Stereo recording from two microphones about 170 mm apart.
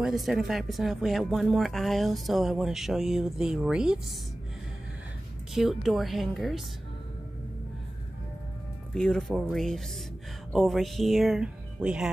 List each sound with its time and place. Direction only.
0.0 s speech: centre (ahead or behind)
5.5 s speech: centre (ahead or behind)
8.9 s speech: centre (ahead or behind)